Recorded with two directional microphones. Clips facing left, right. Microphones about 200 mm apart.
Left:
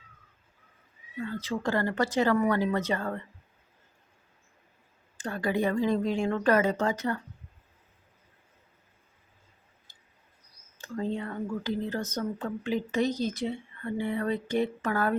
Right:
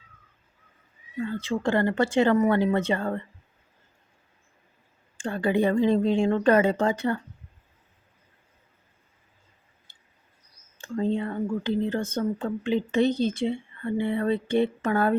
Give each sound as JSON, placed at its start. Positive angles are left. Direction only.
{"t": 1.2, "sound": "speech", "side_deg": -25}
{"t": 5.1, "sound": "speech", "side_deg": -30}
{"t": 10.8, "sound": "speech", "side_deg": -25}